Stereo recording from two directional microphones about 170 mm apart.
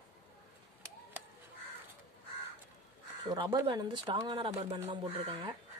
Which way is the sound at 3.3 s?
25° right (ahead or behind).